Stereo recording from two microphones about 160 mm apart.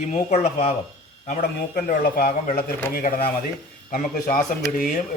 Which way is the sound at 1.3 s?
60° left (ahead or behind).